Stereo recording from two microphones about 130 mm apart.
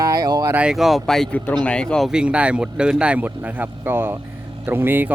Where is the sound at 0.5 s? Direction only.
5° right (ahead or behind).